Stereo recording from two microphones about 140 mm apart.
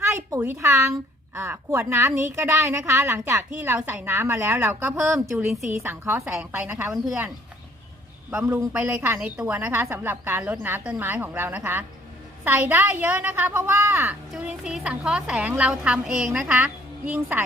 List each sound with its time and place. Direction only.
0.1 s a sound: 25° right (ahead or behind)
0.4 s a woman's voice: 20° right (ahead or behind)
8.3 s a woman's voice: 10° right (ahead or behind)
14.3 s a woman's voice: 5° right (ahead or behind)